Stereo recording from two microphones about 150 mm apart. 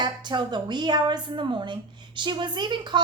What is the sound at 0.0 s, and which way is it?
A woman's voice, 30° right (ahead or behind).